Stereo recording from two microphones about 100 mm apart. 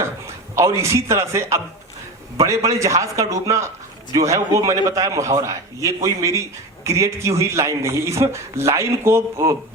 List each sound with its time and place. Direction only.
0.5 s a man's voice: 30° right (ahead or behind)